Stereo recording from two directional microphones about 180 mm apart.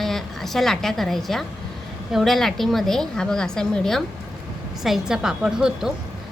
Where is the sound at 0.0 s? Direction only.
Centre (ahead or behind).